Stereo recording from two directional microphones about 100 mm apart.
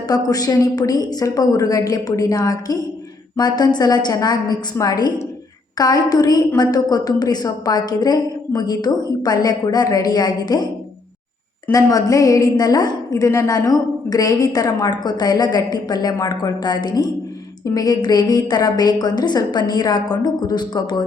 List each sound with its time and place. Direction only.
0.1 s a woman's voice: 40° left (ahead or behind)
11.7 s a woman's voice: 35° left (ahead or behind)
13.7 s a woman's voice: 40° left (ahead or behind)